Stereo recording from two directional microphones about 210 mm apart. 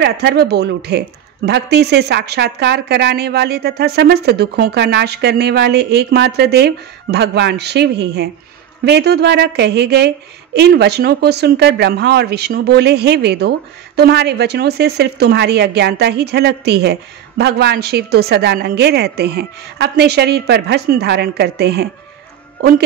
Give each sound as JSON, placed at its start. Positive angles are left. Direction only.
{"t": 0.0, "sound": "a woman's voice", "side_deg": -50}